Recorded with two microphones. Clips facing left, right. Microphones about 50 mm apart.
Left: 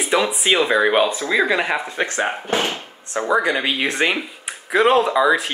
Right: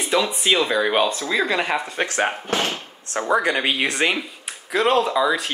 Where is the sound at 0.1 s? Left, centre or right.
Centre.